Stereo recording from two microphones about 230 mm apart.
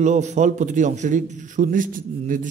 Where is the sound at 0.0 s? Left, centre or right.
Right.